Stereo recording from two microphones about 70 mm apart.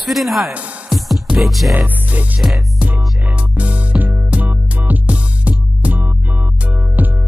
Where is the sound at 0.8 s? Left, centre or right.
Centre.